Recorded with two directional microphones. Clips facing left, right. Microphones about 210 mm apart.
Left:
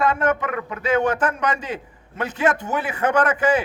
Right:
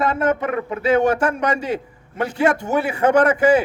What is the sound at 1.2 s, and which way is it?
A man's voice, 10° right (ahead or behind).